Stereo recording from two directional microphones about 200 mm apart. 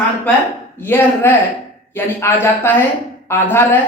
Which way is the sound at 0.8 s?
10° left (ahead or behind).